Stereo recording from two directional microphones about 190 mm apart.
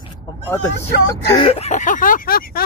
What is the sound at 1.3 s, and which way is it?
Speech, 30° left (ahead or behind).